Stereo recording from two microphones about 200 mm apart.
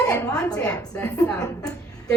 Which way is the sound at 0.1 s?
15° left (ahead or behind).